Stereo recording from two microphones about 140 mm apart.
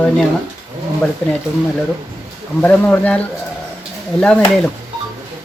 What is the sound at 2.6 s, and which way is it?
A woman's voice, 10° left (ahead or behind).